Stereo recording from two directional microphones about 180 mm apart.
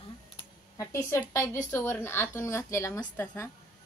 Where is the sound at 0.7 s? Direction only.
15° left (ahead or behind).